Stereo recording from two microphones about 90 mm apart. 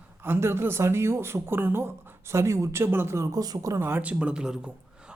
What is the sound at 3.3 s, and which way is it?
Speech, 45° right (ahead or behind).